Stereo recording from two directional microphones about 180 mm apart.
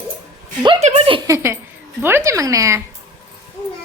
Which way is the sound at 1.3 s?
15° right (ahead or behind).